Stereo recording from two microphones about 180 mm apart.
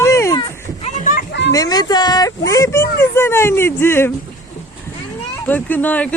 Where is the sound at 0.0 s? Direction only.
15° left (ahead or behind).